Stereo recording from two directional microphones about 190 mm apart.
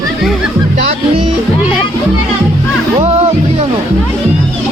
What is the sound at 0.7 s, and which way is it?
Speech, 35° right (ahead or behind).